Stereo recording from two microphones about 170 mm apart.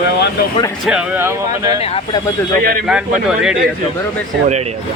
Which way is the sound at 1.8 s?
35° left (ahead or behind).